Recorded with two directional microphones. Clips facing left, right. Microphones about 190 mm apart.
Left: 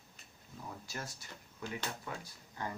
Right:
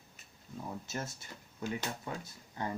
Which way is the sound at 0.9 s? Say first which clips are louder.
Right 4 dB; 25° right (ahead or behind).